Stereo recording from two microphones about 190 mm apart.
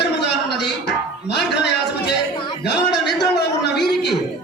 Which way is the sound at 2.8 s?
60° left (ahead or behind).